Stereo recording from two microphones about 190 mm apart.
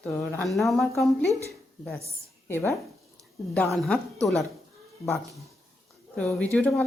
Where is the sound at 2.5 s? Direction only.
15° left (ahead or behind).